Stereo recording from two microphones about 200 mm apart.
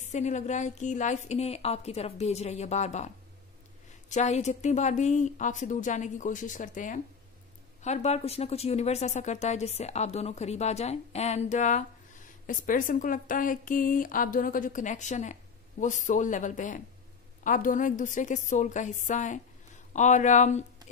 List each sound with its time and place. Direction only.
0.0 s speech: 35° left (ahead or behind)
4.1 s a woman's voice: 35° left (ahead or behind)